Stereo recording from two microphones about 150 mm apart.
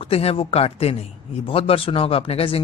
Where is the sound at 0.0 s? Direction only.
40° left (ahead or behind).